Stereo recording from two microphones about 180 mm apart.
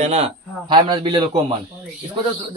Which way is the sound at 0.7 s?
25° right (ahead or behind).